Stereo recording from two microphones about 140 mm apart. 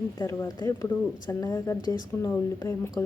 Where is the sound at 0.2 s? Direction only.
25° left (ahead or behind).